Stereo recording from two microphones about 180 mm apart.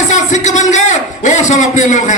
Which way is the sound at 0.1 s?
40° left (ahead or behind).